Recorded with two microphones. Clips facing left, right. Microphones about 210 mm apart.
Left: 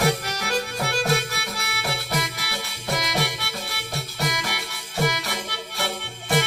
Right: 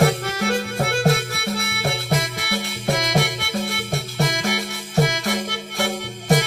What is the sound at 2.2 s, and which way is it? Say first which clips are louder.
Music: right 6 dB; 55° right (ahead or behind).